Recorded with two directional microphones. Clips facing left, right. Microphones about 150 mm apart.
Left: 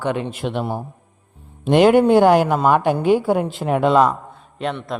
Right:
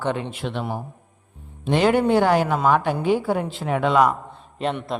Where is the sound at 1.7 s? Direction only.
55° left (ahead or behind).